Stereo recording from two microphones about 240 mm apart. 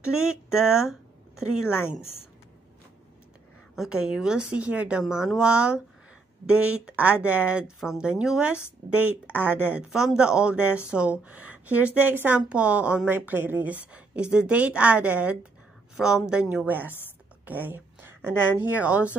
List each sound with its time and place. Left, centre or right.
0.2 s speech: centre
3.7 s a woman's voice: centre
8.8 s speech: right
9.3 s a woman's voice: centre